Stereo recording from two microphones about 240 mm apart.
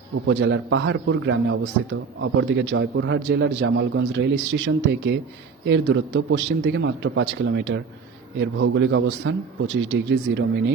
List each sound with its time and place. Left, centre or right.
0.3 s a man's voice: right